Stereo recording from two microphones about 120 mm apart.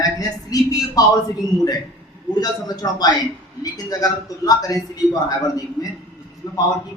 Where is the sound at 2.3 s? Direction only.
35° left (ahead or behind).